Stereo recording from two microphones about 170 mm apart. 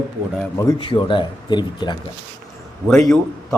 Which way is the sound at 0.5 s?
25° left (ahead or behind).